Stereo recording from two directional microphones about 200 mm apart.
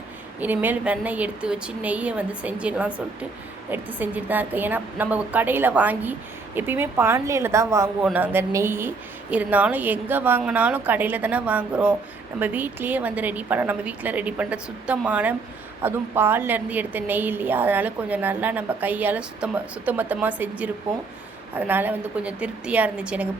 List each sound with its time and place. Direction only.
0.3 s a woman's voice: 10° right (ahead or behind)